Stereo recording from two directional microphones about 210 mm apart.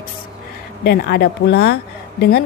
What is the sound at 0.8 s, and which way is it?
A woman's voice, 50° left (ahead or behind).